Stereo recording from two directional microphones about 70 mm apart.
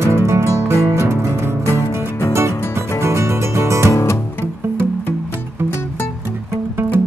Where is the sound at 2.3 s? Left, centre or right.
Right.